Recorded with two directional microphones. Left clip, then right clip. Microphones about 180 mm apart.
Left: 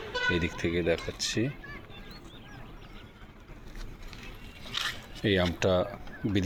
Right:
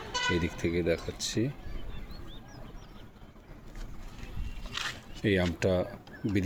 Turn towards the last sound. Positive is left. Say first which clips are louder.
# left 1 dB
turn(degrees=-5)  # may be behind; listen again after turning